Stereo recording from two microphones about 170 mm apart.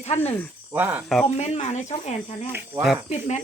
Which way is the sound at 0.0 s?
40° left (ahead or behind).